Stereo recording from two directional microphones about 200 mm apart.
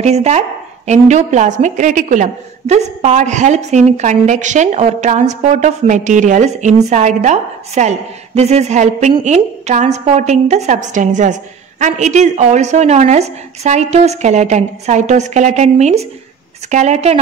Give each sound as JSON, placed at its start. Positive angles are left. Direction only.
{"t": 0.0, "sound": "a woman's voice", "side_deg": -35}